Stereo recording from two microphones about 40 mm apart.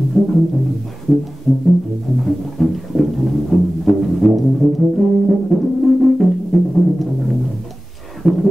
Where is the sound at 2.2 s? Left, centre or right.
Centre.